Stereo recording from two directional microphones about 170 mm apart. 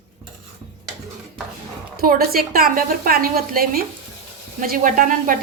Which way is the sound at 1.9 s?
60° right (ahead or behind).